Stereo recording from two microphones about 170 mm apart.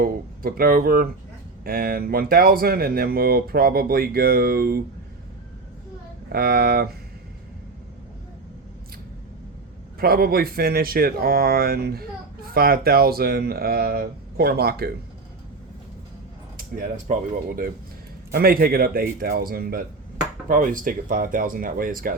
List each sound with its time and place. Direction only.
0.0 s speech: 60° right (ahead or behind)
6.2 s speech: 65° right (ahead or behind)
10.0 s speech: 65° right (ahead or behind)
16.6 s speech: 55° right (ahead or behind)